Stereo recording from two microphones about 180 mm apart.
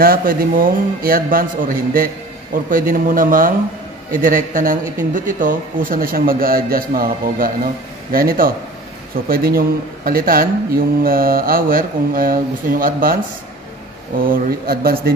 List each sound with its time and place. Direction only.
0.0 s speech: 55° right (ahead or behind)